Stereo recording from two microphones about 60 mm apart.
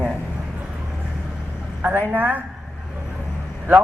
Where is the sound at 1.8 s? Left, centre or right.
Right.